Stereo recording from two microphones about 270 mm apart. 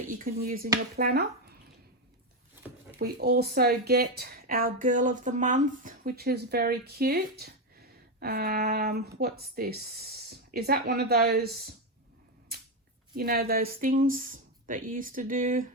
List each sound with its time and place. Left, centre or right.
0.1 s speech: right
3.0 s speech: right
13.1 s speech: right